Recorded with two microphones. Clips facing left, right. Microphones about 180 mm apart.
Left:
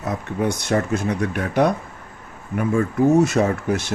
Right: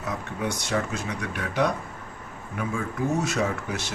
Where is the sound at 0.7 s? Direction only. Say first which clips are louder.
Left 9 dB; 55° left (ahead or behind).